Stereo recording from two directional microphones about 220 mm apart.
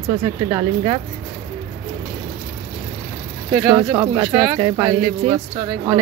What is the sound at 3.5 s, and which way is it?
Speech, 5° right (ahead or behind).